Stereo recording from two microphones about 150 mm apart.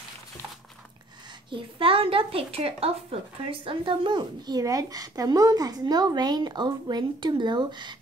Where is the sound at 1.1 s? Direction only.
30° right (ahead or behind).